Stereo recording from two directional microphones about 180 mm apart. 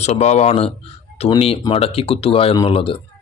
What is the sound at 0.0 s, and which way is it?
Speech, 40° left (ahead or behind).